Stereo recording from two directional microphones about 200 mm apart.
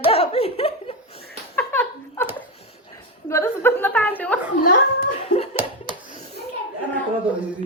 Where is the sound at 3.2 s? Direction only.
15° left (ahead or behind).